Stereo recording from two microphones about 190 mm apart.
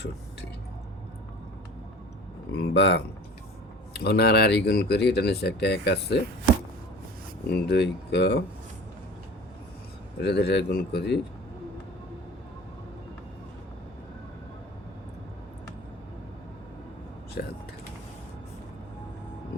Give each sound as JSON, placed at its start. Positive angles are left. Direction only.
{"t": 2.5, "sound": "speech", "side_deg": 60}
{"t": 7.5, "sound": "speech", "side_deg": 60}
{"t": 10.2, "sound": "speech", "side_deg": 60}
{"t": 17.4, "sound": "mechanisms", "side_deg": 55}